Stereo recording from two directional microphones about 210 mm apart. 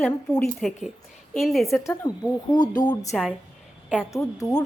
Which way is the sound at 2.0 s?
20° left (ahead or behind).